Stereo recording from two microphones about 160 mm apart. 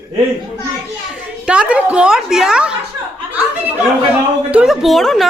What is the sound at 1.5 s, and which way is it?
A woman's voice, 5° right (ahead or behind).